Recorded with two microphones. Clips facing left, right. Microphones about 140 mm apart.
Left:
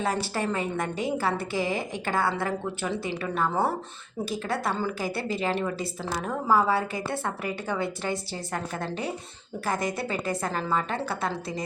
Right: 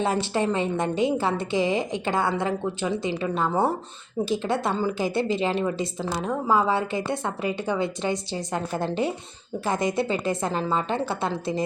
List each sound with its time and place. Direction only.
0.0 s a woman's voice: 25° right (ahead or behind)